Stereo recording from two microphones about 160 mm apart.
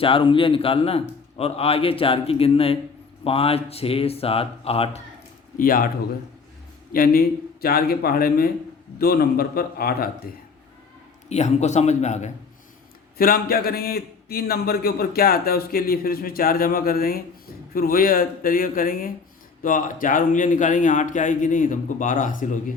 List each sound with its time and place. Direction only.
0.0 s a man's voice: 35° left (ahead or behind)
5.5 s speech: 60° left (ahead or behind)
6.9 s a man's voice: 65° left (ahead or behind)
11.3 s speech: 45° left (ahead or behind)
13.1 s a man's voice: 70° left (ahead or behind)